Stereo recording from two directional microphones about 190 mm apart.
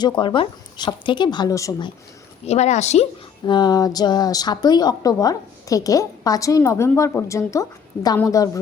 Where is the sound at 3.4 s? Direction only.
20° left (ahead or behind).